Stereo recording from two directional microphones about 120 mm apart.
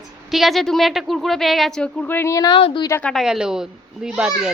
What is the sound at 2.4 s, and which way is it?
Speech, 45° left (ahead or behind).